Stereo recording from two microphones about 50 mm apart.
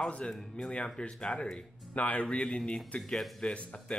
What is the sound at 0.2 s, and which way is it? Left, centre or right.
A man's voice, centre.